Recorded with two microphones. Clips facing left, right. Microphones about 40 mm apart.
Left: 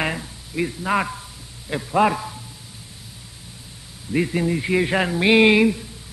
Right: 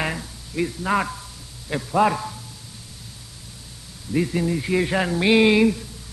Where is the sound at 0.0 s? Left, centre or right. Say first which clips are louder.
Left 2 dB; centre.